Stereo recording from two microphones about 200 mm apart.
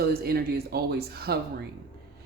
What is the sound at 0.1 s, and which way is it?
Speech, 50° right (ahead or behind).